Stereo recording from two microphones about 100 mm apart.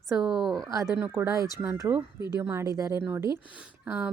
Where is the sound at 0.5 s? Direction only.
35° right (ahead or behind).